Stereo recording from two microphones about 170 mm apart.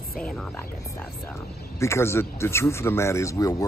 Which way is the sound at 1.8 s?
15° left (ahead or behind).